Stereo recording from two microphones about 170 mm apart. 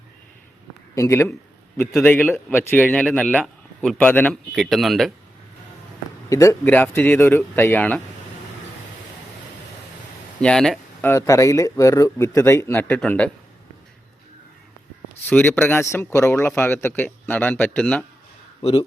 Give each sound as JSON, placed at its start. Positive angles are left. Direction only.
{"t": 0.9, "sound": "a man's voice", "side_deg": 15}
{"t": 6.2, "sound": "a man's voice", "side_deg": 20}
{"t": 10.4, "sound": "speech", "side_deg": 5}
{"t": 11.0, "sound": "a man's voice", "side_deg": 15}
{"t": 15.3, "sound": "a man's voice", "side_deg": 10}
{"t": 18.6, "sound": "speech", "side_deg": 30}